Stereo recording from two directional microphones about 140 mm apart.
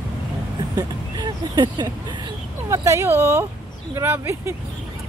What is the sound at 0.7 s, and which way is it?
A woman's voice, 30° right (ahead or behind).